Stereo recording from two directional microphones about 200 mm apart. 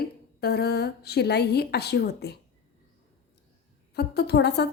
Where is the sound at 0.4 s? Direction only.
55° left (ahead or behind).